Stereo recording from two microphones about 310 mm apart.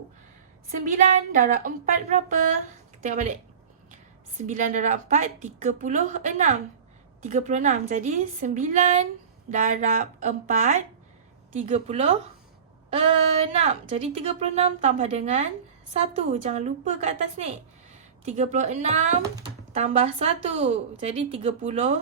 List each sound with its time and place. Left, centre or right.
0.7 s a woman's voice: right
4.4 s a woman's voice: right